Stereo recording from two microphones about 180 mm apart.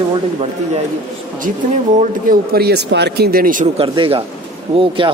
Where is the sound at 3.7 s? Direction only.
30° right (ahead or behind).